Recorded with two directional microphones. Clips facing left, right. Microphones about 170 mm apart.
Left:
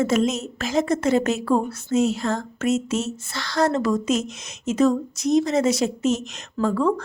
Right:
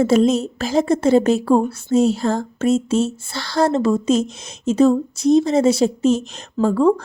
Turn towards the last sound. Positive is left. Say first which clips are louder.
# right 5 dB
turn(degrees=-30)  # may be behind; listen again after turning